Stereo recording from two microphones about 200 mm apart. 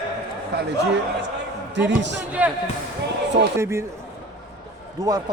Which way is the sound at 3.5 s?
15° right (ahead or behind).